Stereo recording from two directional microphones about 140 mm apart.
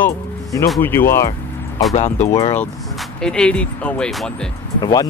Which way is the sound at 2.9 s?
5° left (ahead or behind).